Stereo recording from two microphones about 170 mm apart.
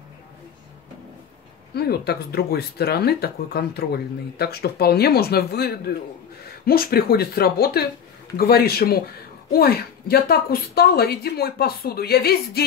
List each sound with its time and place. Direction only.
1.7 s a woman's voice: 70° left (ahead or behind)